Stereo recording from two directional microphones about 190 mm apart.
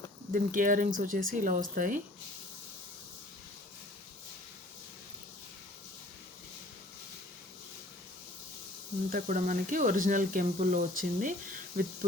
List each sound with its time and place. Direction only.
0.3 s speech: 45° right (ahead or behind)
9.1 s speech: 45° right (ahead or behind)